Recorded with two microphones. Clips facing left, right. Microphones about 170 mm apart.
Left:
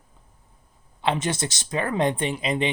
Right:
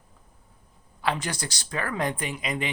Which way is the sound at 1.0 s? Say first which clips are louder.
Left 4 dB; 20° left (ahead or behind).